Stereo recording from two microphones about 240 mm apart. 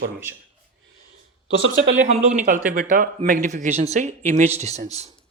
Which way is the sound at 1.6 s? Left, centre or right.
Right.